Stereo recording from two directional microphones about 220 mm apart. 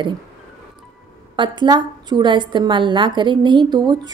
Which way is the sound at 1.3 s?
20° right (ahead or behind).